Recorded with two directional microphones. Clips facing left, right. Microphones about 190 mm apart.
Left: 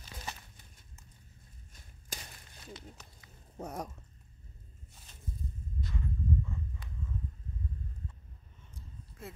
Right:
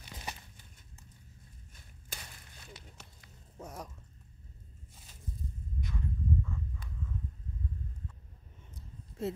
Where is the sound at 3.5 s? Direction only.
60° left (ahead or behind).